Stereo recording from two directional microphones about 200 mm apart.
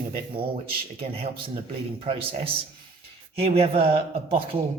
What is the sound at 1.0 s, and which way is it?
A man's voice, 30° right (ahead or behind).